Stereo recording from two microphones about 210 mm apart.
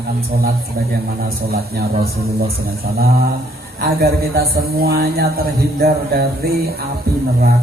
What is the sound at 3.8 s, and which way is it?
A man's voice, 50° right (ahead or behind).